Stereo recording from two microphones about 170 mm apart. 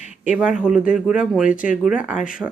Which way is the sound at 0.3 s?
5° right (ahead or behind).